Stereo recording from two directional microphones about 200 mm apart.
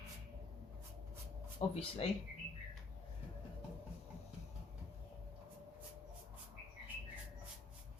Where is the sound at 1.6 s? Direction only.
30° left (ahead or behind).